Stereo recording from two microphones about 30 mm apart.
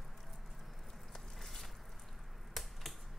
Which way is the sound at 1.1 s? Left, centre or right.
Centre.